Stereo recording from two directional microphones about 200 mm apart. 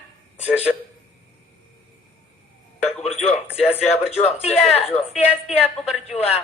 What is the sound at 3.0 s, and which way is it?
Music, 30° left (ahead or behind).